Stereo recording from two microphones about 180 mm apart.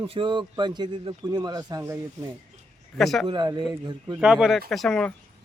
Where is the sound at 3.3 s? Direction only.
25° right (ahead or behind).